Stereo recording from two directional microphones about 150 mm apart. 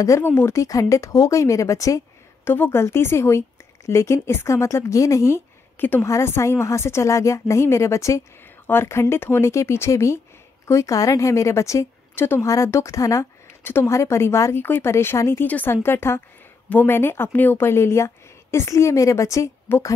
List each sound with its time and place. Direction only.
0.0 s a woman's voice: 20° left (ahead or behind)